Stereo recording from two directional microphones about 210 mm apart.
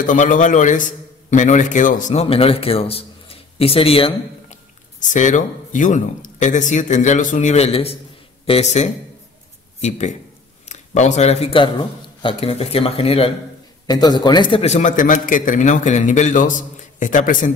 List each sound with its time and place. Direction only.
0.0 s a man's voice: 40° left (ahead or behind)